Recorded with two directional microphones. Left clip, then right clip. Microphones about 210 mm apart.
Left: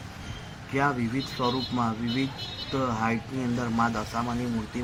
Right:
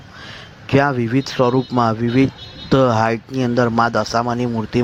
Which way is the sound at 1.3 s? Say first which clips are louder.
Right 12 dB; 40° right (ahead or behind).